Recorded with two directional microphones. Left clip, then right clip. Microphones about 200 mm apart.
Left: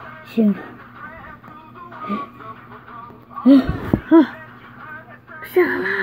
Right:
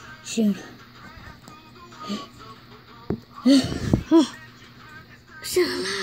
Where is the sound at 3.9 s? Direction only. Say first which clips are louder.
Left 5 dB; 15° right (ahead or behind).